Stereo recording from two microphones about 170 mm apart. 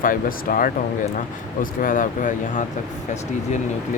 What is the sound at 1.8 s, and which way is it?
Speech, 50° left (ahead or behind).